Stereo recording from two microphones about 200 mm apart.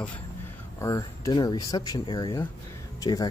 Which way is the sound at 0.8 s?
20° left (ahead or behind).